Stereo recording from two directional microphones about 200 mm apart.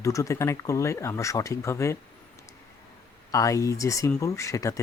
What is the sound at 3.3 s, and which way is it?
Speech, 15° left (ahead or behind).